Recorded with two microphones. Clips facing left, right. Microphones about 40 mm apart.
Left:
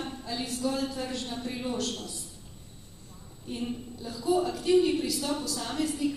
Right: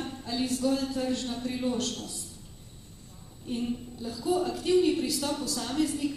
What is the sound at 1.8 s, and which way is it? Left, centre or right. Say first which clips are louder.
Speech: even; left.